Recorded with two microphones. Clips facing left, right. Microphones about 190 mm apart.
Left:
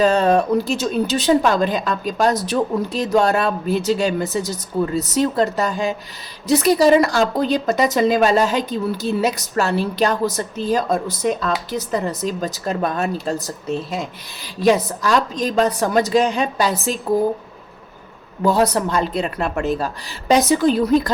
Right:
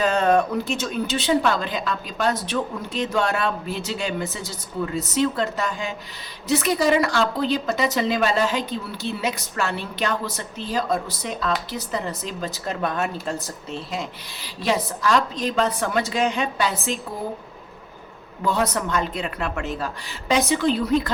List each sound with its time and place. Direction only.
0.0 s a woman's voice: 35° left (ahead or behind)
18.4 s a woman's voice: 35° left (ahead or behind)